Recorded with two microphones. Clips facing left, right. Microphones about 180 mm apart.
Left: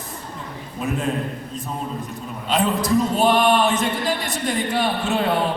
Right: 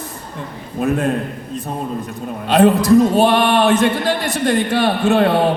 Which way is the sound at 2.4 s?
70° right (ahead or behind).